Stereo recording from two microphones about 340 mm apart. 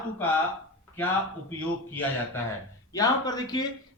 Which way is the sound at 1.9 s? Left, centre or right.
Centre.